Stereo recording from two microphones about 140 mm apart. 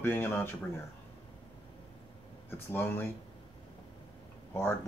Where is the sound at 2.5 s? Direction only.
15° left (ahead or behind).